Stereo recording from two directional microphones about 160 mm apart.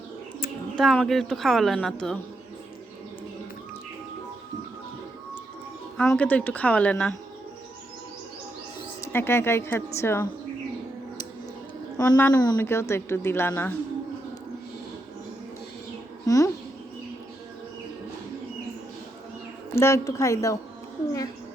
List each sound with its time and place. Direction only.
0.8 s a woman's voice: centre (ahead or behind)
6.0 s a woman's voice: 10° left (ahead or behind)
9.0 s a woman's voice: 15° left (ahead or behind)
11.9 s a woman's voice: 10° left (ahead or behind)
16.2 s speech: 20° left (ahead or behind)
19.7 s a woman's voice: 15° left (ahead or behind)